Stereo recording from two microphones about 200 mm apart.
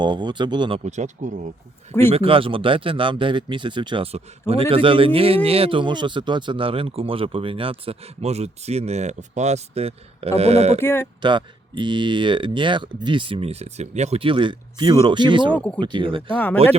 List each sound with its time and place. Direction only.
0.0 s speech: 20° right (ahead or behind)
0.9 s speech: 35° right (ahead or behind)
2.1 s speech: 25° right (ahead or behind)
10.8 s speech: 10° left (ahead or behind)
11.2 s speech: 25° right (ahead or behind)
15.5 s speech: 5° left (ahead or behind)
15.8 s speech: 25° right (ahead or behind)